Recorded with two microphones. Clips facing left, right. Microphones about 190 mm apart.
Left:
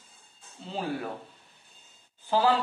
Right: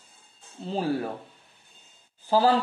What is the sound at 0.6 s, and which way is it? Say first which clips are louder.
Speech: right 5 dB; 40° right (ahead or behind).